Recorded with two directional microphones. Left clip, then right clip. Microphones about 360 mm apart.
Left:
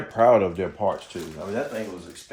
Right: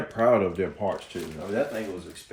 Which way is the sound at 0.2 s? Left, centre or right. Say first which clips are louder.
Left 4 dB; centre.